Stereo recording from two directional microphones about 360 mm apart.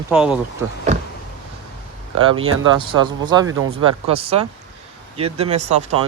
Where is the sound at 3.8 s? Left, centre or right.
Centre.